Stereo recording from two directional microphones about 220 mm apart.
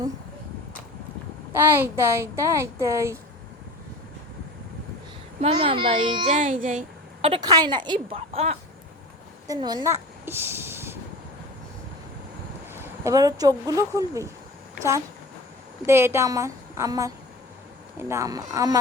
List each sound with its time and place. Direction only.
1.5 s speech: 10° right (ahead or behind)
5.4 s a child's voice: 25° right (ahead or behind)
12.7 s speech: 10° right (ahead or behind)
15.9 s speech: 10° right (ahead or behind)
18.1 s speech: 15° right (ahead or behind)